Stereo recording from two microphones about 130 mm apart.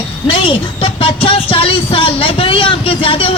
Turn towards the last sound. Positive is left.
turn(degrees=45)  # may be behind; listen again after turning